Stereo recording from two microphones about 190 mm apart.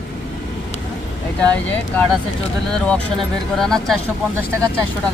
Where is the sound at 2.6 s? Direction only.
5° left (ahead or behind).